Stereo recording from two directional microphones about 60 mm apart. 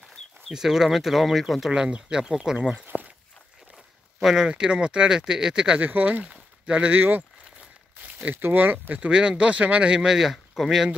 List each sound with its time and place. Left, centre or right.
0.5 s speech: centre
2.9 s a sound: left
4.2 s speech: centre
5.8 s speech: right
6.2 s a sound: centre
7.0 s speech: right
8.0 s a sound: right
8.4 s speech: right
8.8 s speech: right; by 10.9 s centre